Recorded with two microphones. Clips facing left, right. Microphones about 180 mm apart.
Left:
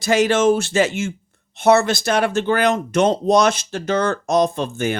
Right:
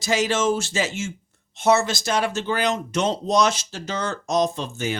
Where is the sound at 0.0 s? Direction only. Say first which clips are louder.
Left 6 dB; 60° left (ahead or behind).